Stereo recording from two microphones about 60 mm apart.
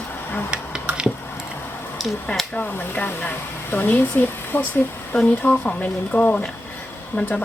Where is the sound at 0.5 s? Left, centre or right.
Right.